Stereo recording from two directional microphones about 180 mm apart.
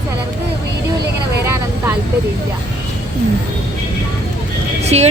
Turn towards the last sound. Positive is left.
turn(degrees=-35)  # may be behind; listen again after turning